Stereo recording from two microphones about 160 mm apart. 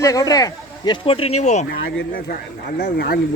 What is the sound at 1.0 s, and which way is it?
Speech, 35° left (ahead or behind).